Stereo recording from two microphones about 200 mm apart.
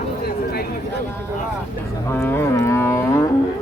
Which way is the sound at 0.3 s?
50° left (ahead or behind).